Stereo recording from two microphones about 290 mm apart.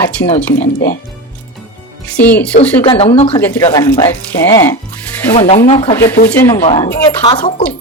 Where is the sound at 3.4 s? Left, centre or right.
Centre.